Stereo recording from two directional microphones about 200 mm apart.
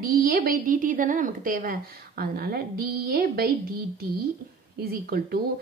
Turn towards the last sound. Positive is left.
turn(degrees=-50)  # may be behind; listen again after turning